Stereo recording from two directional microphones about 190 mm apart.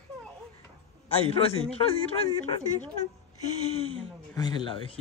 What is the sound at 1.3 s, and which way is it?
Speech, 30° left (ahead or behind).